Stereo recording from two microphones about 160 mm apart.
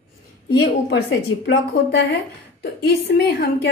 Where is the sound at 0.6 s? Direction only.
90° left.